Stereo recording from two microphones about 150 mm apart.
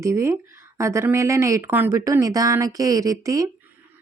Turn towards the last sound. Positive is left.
turn(degrees=-25)  # may be behind; listen again after turning